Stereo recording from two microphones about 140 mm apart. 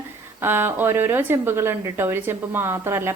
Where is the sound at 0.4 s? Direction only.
15° right (ahead or behind).